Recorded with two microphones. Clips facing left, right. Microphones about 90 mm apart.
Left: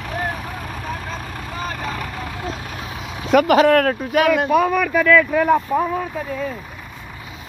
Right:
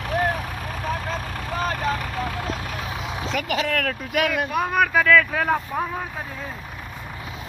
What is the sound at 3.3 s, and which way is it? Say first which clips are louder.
Speech: left 13 dB; 50° left (ahead or behind).